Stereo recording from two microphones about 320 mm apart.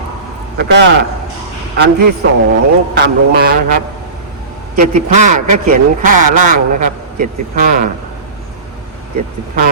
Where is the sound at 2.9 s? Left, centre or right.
Right.